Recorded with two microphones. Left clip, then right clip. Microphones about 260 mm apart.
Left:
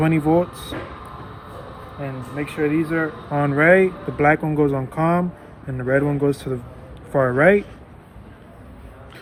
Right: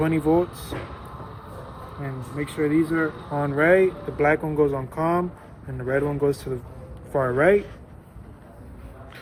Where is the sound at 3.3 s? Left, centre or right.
Left.